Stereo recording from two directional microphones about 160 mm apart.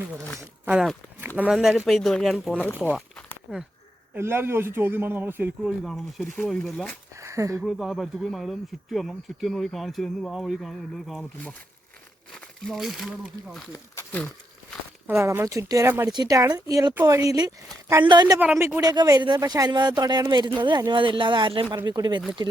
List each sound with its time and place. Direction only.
0.7 s a man's voice: 5° right (ahead or behind)
7.2 s a sound: 20° right (ahead or behind)
7.6 s speech: centre (ahead or behind)
13.7 s speech: 15° left (ahead or behind)
15.0 s a man's voice: 15° right (ahead or behind)
18.3 s a man's voice: 10° right (ahead or behind)
18.8 s speech: 25° right (ahead or behind)